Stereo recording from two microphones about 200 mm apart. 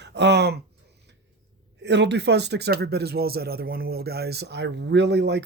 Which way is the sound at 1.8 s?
60° right (ahead or behind).